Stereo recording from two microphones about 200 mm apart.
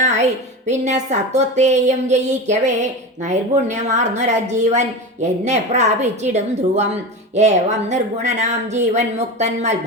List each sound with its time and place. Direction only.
0.0 s music: 35° right (ahead or behind)
0.7 s a woman's voice: 35° right (ahead or behind)